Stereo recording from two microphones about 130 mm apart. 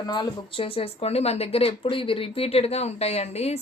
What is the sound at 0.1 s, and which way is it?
Speech, 40° left (ahead or behind).